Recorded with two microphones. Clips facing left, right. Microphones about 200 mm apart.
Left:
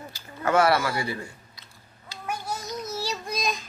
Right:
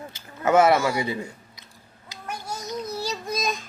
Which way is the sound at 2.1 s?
15° right (ahead or behind).